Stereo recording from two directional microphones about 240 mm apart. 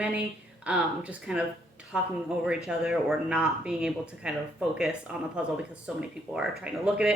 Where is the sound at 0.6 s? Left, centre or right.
Centre.